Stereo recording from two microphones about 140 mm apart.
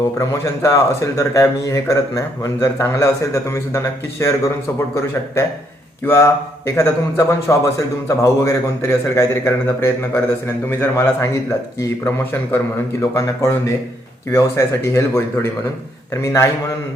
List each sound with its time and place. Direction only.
0.2 s a man's voice: 25° left (ahead or behind)
6.1 s a man's voice: 20° left (ahead or behind)